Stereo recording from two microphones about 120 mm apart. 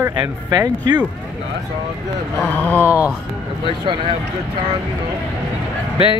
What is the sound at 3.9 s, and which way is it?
Speech, 40° right (ahead or behind).